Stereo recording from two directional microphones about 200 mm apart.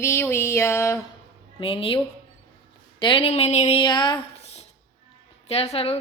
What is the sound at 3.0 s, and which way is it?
A woman's voice, 25° left (ahead or behind).